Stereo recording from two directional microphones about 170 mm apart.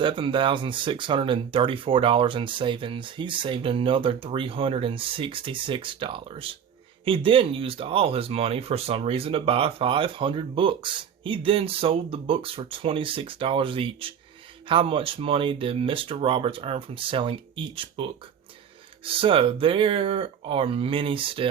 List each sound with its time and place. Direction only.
0.0 s speech: 30° right (ahead or behind)